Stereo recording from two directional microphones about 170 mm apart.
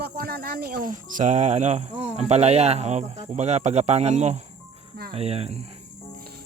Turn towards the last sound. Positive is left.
turn(degrees=-35)  # may be behind; listen again after turning